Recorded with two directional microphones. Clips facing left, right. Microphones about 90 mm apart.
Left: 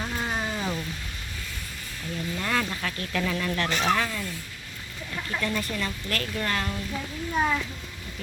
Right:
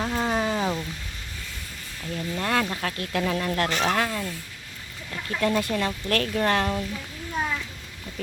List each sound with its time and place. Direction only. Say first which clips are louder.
0.0 s a sound: right 5 dB; 75° right (ahead or behind)
2.4 s speech: right 3 dB; 55° right (ahead or behind)
5.4 s speech: right 7 dB; 50° right (ahead or behind)
5.7 s speech: right 6 dB; 60° right (ahead or behind)